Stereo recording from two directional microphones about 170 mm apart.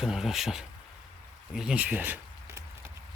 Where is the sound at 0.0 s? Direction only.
5° right (ahead or behind).